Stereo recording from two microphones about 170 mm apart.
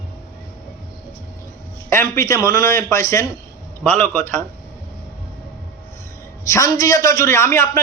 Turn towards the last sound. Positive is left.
turn(degrees=15)  # may be behind; listen again after turning